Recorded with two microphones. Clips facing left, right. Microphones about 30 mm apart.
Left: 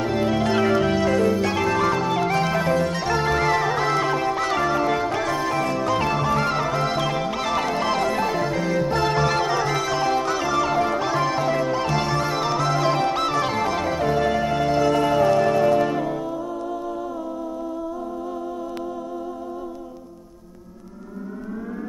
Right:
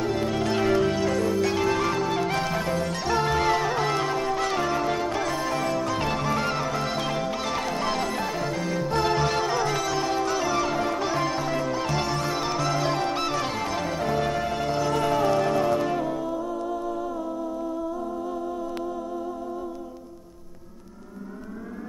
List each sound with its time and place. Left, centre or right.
0.0 s music: centre
21.5 s civil defense siren: centre